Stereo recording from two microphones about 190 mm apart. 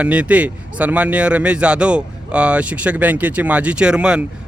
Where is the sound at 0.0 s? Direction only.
5° right (ahead or behind).